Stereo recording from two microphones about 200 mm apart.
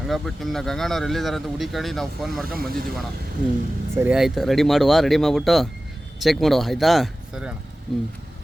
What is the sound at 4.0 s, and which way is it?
Speech, 5° right (ahead or behind).